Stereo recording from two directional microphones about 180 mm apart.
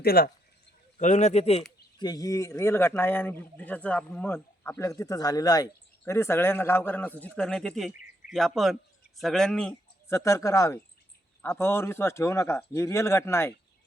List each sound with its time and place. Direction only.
0.0 s speech: 60° left (ahead or behind)
0.9 s speech: 40° left (ahead or behind)
2.0 s a man's voice: 20° left (ahead or behind); by 9.7 s 5° left (ahead or behind)
10.1 s a man's voice: 15° left (ahead or behind)